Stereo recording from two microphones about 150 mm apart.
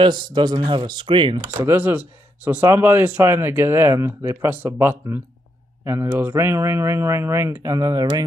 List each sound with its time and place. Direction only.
0.0 s speech: 30° right (ahead or behind)
1.4 s speech: 20° right (ahead or behind)